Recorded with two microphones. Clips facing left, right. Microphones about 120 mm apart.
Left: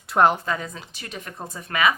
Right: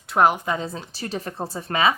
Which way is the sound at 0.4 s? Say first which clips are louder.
Right 2 dB; 25° right (ahead or behind).